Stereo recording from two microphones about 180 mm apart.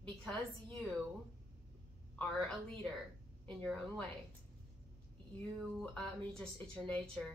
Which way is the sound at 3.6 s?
5° left (ahead or behind).